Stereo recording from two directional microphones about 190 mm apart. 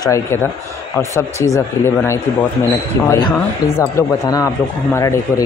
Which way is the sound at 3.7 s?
15° left (ahead or behind).